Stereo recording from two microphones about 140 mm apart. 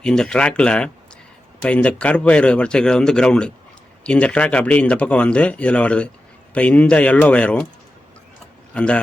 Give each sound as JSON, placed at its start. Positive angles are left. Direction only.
{"t": 0.0, "sound": "speech", "side_deg": 5}
{"t": 8.7, "sound": "speech", "side_deg": 10}